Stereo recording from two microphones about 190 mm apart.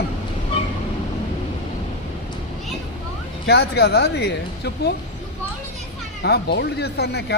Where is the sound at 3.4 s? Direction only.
60° left (ahead or behind).